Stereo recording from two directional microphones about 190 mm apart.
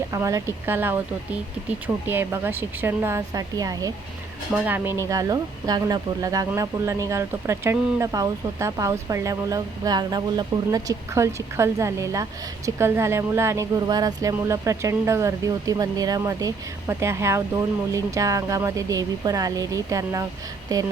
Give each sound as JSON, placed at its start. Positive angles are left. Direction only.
{"t": 0.1, "sound": "speech", "side_deg": -15}
{"t": 4.5, "sound": "speech", "side_deg": -10}